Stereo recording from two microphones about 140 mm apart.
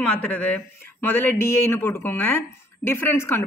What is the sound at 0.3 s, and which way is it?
A woman's voice, 10° left (ahead or behind).